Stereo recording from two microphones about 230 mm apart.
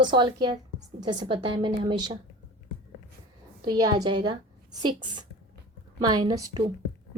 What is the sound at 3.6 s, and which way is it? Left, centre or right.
A woman's voice, centre.